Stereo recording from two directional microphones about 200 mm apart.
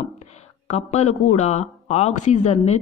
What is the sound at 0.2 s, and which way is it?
Speech, 35° left (ahead or behind).